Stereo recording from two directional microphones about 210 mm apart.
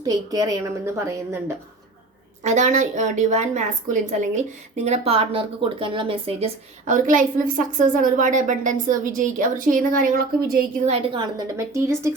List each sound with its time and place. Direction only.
0.0 s a woman's voice: 15° right (ahead or behind)
2.4 s speech: 35° right (ahead or behind)
10.8 s a woman's voice: 25° right (ahead or behind)